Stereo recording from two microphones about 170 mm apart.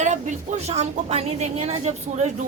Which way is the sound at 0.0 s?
45° right (ahead or behind).